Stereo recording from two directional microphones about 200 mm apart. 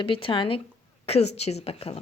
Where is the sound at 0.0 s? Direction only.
25° left (ahead or behind).